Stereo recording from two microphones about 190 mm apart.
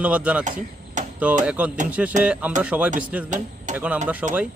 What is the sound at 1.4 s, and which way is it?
A man's voice, 5° right (ahead or behind).